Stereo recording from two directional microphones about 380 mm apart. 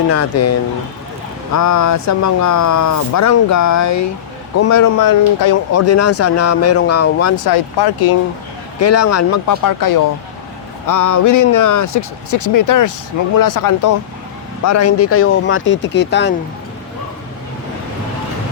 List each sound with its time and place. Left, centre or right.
0.1 s speech: left
5.7 s speech: left
7.5 s speech: left
8.8 s speech: left
14.6 s speech: left